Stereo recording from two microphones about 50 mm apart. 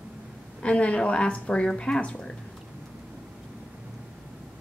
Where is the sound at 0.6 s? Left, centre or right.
Left.